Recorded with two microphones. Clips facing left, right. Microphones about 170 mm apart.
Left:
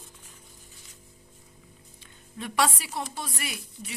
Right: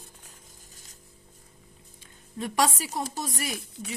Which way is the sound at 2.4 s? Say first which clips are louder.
Right 1 dB; 40° right (ahead or behind).